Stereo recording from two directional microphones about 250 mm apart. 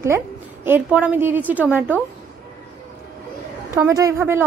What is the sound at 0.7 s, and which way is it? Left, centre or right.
A woman's voice, centre.